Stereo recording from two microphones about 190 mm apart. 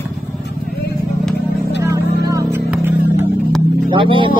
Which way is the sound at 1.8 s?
15° right (ahead or behind).